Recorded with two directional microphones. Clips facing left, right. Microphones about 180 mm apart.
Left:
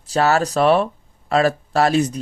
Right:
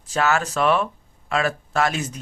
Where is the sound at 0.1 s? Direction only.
35° left (ahead or behind).